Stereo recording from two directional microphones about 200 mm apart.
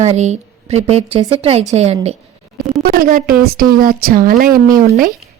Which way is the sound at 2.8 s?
45° right (ahead or behind).